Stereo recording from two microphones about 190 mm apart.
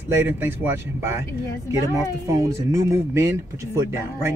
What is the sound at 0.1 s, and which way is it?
Speech, 10° right (ahead or behind).